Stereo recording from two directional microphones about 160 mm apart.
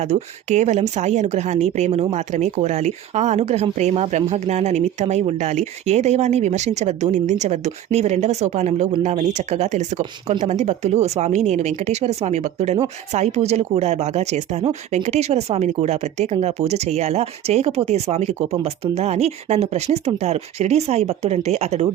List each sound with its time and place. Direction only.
0.0 s a woman's voice: 45° right (ahead or behind)